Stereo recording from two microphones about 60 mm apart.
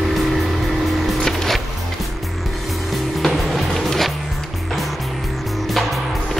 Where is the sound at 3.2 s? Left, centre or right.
Centre.